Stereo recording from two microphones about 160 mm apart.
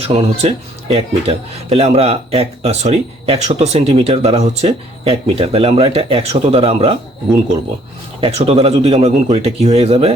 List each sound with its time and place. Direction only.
0.1 s speech: 40° right (ahead or behind)
8.2 s speech: 40° right (ahead or behind)